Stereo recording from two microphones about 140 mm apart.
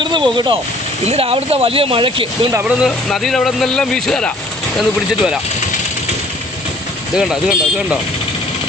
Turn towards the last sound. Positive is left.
turn(degrees=-5)  # may be behind; listen again after turning